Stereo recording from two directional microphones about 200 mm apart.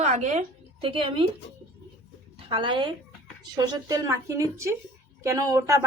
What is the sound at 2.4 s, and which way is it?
Speech, 25° right (ahead or behind).